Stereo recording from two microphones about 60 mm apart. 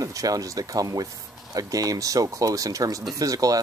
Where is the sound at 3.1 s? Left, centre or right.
Right.